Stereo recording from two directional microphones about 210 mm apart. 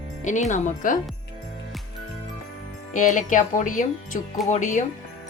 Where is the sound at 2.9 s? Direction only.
35° left (ahead or behind).